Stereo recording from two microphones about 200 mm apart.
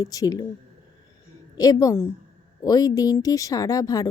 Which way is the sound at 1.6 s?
20° left (ahead or behind).